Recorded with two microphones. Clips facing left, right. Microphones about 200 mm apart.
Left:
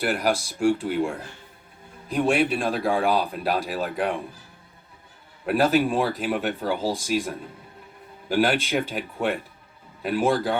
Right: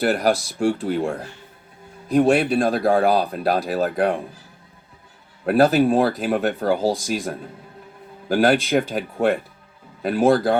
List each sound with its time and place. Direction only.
0.0 s speech: 40° right (ahead or behind)
2.1 s speech: 40° right (ahead or behind)
5.5 s speech: 40° right (ahead or behind)